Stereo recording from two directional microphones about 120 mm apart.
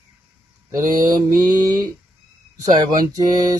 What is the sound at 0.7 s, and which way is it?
Mantra, 25° right (ahead or behind).